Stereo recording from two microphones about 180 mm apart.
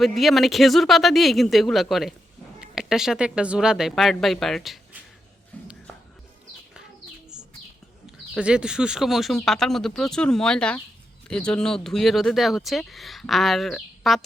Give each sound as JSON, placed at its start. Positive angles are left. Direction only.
{"t": 0.0, "sound": "speech", "side_deg": 0}
{"t": 5.5, "sound": "a sound", "side_deg": 10}
{"t": 8.4, "sound": "speech", "side_deg": -5}